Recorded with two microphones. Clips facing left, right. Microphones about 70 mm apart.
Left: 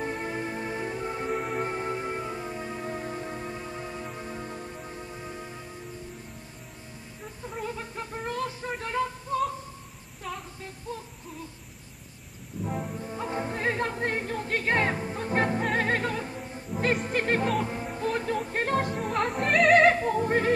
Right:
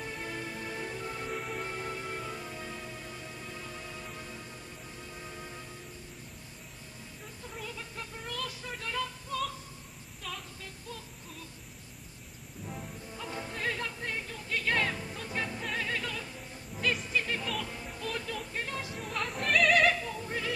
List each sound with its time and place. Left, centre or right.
0.0 s music: left
2.9 s music: left; by 5.6 s centre
7.5 s music: left
10.6 s a sound: left
12.6 s music: left